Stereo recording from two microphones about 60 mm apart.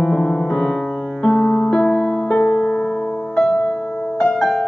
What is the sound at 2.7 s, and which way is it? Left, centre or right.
Music, centre.